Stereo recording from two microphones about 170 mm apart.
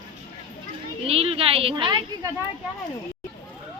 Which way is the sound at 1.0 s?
35° right (ahead or behind).